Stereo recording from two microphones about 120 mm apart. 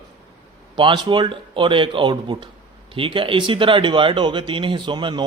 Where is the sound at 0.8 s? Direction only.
40° right (ahead or behind).